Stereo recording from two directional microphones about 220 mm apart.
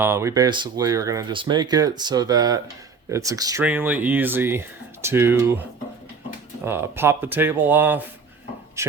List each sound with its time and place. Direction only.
0.0 s speech: 10° right (ahead or behind)
6.7 s speech: 10° right (ahead or behind)